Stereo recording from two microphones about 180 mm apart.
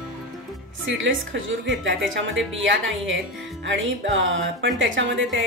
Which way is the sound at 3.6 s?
90° right.